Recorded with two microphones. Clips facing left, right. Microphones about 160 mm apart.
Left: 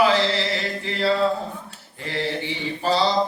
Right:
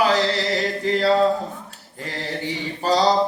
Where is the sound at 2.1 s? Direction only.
40° right (ahead or behind).